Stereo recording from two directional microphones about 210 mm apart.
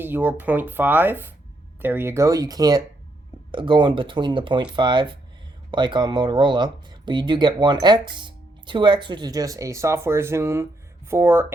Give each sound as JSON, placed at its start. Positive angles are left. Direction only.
{"t": 0.0, "sound": "speech", "side_deg": -10}